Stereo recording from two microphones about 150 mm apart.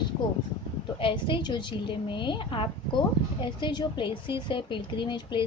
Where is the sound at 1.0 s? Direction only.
35° left (ahead or behind).